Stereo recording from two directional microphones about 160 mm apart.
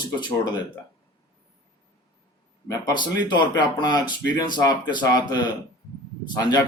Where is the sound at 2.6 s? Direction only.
25° left (ahead or behind).